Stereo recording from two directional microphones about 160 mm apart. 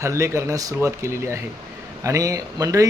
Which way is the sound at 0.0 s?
15° right (ahead or behind).